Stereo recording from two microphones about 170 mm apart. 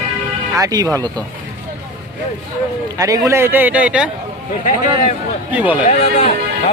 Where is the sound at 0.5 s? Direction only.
20° right (ahead or behind).